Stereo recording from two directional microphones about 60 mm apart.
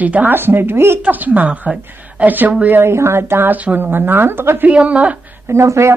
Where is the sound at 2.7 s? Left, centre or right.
Right.